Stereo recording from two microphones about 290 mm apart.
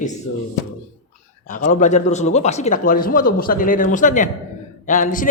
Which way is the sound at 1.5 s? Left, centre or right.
Left.